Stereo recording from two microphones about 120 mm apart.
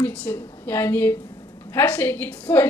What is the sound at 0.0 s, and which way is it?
A woman's voice, 15° left (ahead or behind).